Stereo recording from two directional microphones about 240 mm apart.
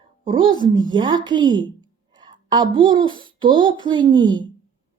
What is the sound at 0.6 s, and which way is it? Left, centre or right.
A woman's voice, centre.